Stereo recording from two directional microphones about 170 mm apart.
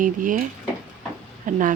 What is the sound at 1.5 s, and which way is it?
Speech, 50° right (ahead or behind).